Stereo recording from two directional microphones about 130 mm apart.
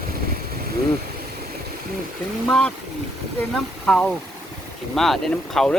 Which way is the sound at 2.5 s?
10° left (ahead or behind).